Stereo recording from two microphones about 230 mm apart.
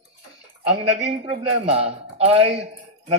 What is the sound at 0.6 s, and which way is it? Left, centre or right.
A man's voice, right.